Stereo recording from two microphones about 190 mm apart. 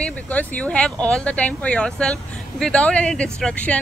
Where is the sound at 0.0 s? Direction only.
10° left (ahead or behind).